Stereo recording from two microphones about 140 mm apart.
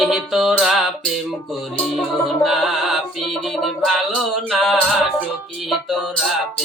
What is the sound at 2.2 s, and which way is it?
Music, centre (ahead or behind).